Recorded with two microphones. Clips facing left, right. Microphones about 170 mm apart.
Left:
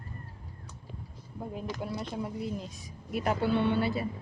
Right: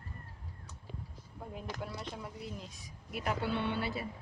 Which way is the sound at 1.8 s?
30° left (ahead or behind).